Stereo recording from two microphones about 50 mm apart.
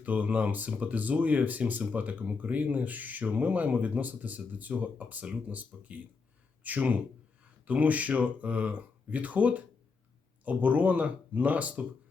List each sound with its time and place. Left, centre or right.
0.0 s speech: right